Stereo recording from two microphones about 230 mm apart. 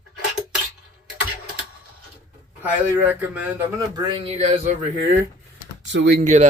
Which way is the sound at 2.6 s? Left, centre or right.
Centre.